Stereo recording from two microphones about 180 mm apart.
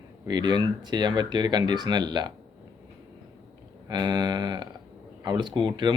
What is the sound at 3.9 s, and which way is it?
Speech, 25° right (ahead or behind).